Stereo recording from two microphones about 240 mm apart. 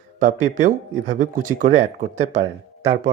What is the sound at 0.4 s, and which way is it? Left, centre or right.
Speech, right.